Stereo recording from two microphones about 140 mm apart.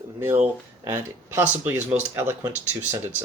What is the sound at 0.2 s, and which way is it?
Speech, 15° right (ahead or behind).